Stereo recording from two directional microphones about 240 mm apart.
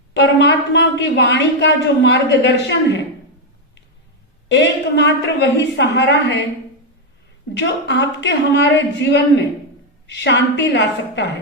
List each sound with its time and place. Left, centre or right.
0.1 s a woman's voice: left
4.4 s a woman's voice: left
7.5 s a woman's voice: left